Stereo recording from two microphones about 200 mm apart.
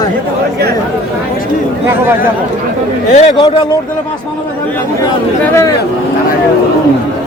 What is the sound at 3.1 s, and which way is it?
Speech, 35° left (ahead or behind).